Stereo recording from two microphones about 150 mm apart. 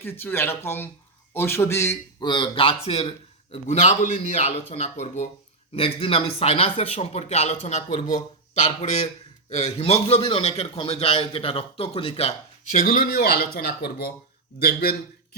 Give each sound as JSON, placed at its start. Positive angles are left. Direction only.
{"t": 0.0, "sound": "speech", "side_deg": 15}
{"t": 5.7, "sound": "speech", "side_deg": 40}
{"t": 12.7, "sound": "a man's voice", "side_deg": 75}